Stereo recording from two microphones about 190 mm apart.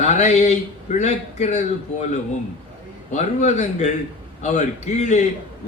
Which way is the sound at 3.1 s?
35° left (ahead or behind).